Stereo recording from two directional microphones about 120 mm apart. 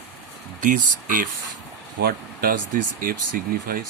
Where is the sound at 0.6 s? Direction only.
90° right.